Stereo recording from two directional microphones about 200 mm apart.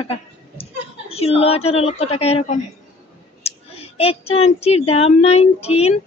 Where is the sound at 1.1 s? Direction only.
30° left (ahead or behind).